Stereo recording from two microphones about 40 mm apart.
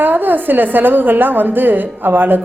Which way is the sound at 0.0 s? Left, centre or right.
Right.